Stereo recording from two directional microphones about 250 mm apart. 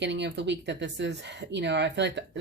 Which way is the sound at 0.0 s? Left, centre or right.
Right.